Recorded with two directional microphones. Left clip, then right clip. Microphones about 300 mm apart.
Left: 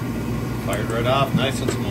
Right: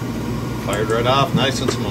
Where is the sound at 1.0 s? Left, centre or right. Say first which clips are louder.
Right 2 dB; right.